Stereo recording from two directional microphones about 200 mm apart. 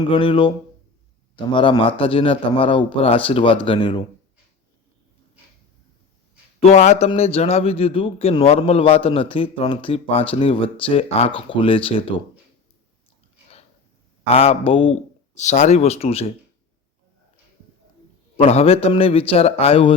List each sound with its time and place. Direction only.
0.0 s a man's voice: 25° left (ahead or behind)
1.5 s a man's voice: 25° left (ahead or behind)
6.6 s a man's voice: 35° left (ahead or behind)
14.3 s a man's voice: 30° left (ahead or behind)
18.3 s a man's voice: 30° left (ahead or behind)